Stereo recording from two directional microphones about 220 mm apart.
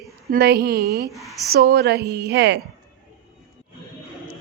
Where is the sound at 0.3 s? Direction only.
45° right (ahead or behind).